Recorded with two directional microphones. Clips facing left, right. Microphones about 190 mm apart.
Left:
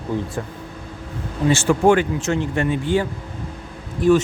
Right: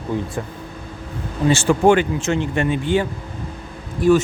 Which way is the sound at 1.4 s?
30° right (ahead or behind).